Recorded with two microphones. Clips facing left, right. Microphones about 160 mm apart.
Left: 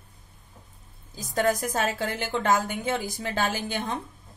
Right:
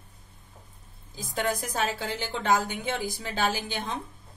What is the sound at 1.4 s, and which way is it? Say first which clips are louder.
A woman's voice: left 4 dB; 45° left (ahead or behind).